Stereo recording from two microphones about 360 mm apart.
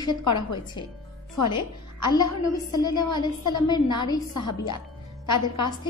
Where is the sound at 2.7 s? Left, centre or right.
Centre.